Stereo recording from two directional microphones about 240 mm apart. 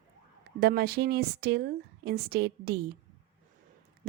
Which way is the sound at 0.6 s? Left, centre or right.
Right.